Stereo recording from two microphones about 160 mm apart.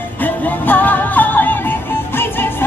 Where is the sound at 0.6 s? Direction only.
10° left (ahead or behind).